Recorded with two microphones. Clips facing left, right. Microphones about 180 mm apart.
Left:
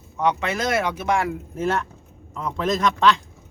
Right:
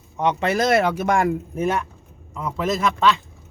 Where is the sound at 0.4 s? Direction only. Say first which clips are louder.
Right 5 dB; 35° right (ahead or behind).